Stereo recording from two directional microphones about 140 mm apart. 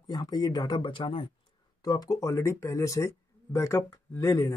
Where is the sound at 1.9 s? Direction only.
25° left (ahead or behind).